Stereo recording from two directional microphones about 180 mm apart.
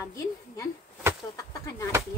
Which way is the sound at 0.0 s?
15° left (ahead or behind).